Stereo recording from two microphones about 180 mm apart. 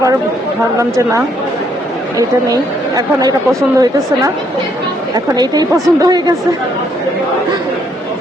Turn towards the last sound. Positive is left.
turn(degrees=-20)  # may be behind; listen again after turning